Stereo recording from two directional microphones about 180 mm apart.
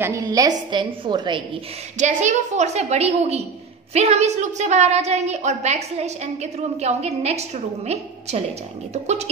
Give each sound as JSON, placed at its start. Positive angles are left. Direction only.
{"t": 0.0, "sound": "a woman's voice", "side_deg": -20}
{"t": 2.0, "sound": "a woman's voice", "side_deg": -40}